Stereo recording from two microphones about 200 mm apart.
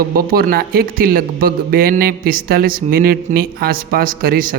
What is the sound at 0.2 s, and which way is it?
A man's voice, 50° right (ahead or behind).